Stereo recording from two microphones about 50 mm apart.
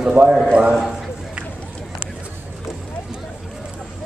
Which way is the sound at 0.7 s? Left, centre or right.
Centre.